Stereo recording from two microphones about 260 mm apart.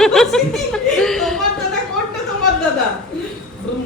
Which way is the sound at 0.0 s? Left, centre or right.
Centre.